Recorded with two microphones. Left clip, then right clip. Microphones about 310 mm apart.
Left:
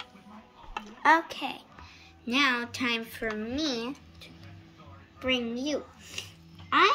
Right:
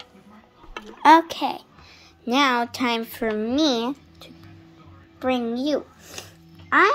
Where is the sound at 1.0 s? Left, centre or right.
Right.